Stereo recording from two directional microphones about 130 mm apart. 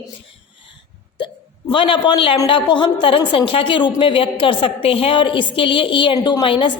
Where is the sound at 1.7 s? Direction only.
40° left (ahead or behind).